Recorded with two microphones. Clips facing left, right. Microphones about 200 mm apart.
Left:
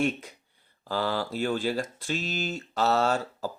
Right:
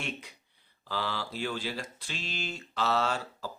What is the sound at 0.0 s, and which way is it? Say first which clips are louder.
Speech: left 11 dB; 45° left (ahead or behind).